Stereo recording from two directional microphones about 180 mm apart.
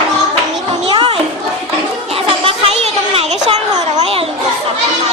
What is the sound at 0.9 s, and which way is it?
Children playing, 30° right (ahead or behind).